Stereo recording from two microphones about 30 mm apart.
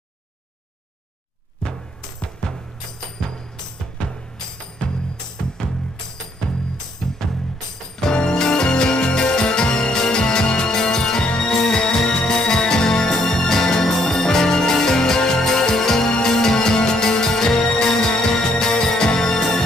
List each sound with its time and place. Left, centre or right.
2.2 s music: left
5.6 s music: left
7.0 s music: centre